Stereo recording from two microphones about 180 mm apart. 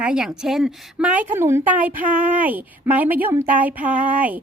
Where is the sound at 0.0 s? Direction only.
5° right (ahead or behind).